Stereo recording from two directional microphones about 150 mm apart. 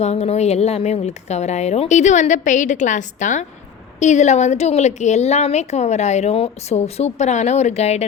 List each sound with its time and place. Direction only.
0.0 s a woman's voice: 45° left (ahead or behind)